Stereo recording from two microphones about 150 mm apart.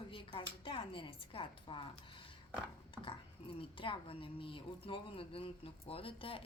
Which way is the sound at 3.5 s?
35° left (ahead or behind).